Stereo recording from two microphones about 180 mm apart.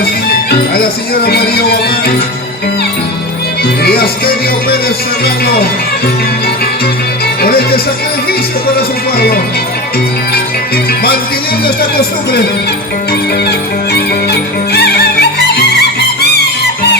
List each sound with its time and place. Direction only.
0.7 s speech: 60° left (ahead or behind)
3.8 s music: 55° left (ahead or behind)
5.2 s speech: 60° left (ahead or behind)
7.4 s speech: 60° left (ahead or behind)
9.1 s speech: 55° left (ahead or behind)
14.3 s music: 65° left (ahead or behind)